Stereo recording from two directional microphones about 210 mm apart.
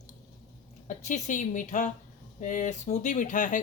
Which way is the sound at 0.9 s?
35° left (ahead or behind).